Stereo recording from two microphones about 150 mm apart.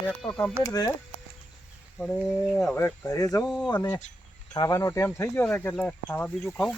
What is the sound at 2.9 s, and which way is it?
Speech, 25° left (ahead or behind).